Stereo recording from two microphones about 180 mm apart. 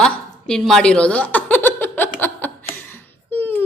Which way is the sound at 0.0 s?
5° left (ahead or behind).